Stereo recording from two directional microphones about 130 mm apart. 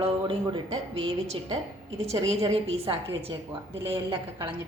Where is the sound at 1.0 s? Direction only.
50° right (ahead or behind).